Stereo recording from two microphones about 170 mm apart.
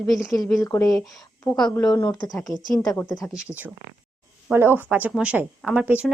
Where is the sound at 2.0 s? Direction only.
25° left (ahead or behind).